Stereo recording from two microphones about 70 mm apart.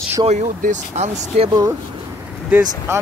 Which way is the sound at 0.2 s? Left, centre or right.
Right.